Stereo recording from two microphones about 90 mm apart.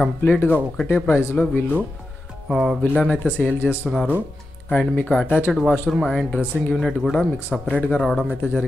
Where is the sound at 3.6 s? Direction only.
25° left (ahead or behind).